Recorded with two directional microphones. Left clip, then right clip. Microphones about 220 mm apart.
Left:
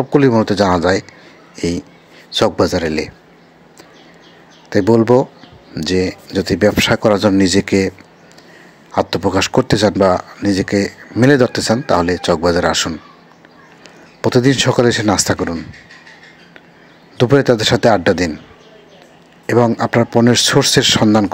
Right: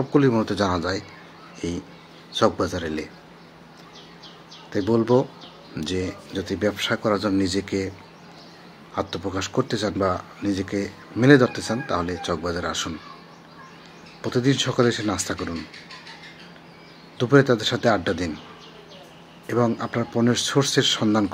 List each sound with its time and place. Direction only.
0.1 s speech: 30° left (ahead or behind)
4.6 s speech: 30° left (ahead or behind)
8.9 s speech: 35° left (ahead or behind)
14.2 s speech: 35° left (ahead or behind)
17.2 s speech: 35° left (ahead or behind)
19.4 s a man's voice: 35° left (ahead or behind)